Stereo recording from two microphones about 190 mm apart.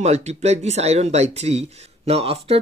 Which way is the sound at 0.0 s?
35° right (ahead or behind).